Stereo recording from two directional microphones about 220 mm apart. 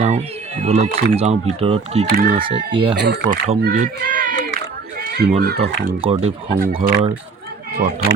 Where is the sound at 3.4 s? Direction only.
35° right (ahead or behind).